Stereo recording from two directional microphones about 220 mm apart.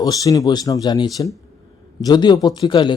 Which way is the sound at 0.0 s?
15° left (ahead or behind).